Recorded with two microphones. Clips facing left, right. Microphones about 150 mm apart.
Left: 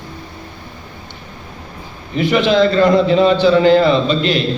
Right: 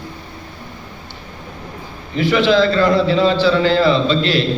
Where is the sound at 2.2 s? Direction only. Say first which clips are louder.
Left 1 dB; 20° left (ahead or behind).